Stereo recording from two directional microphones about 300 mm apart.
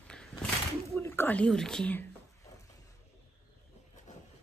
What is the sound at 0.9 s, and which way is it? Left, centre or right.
Speech, centre.